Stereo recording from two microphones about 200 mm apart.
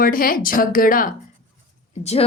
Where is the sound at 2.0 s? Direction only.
30° left (ahead or behind).